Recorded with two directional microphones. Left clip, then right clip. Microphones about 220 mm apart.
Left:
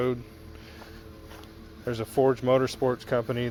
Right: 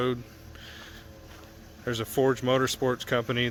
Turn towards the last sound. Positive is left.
turn(degrees=-20)  # may be behind; listen again after turning